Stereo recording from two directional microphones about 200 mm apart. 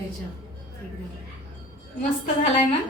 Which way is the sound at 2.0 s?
35° left (ahead or behind).